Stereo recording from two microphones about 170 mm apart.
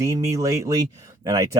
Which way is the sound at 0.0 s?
20° right (ahead or behind).